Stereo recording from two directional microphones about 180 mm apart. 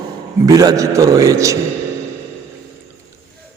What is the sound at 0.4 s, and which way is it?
A man's voice, 20° right (ahead or behind).